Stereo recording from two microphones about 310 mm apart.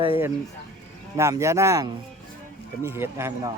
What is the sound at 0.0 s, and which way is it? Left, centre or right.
A man's voice, centre.